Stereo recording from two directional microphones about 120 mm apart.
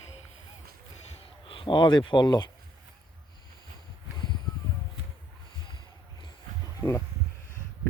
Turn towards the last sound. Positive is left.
turn(degrees=15)  # may be behind; listen again after turning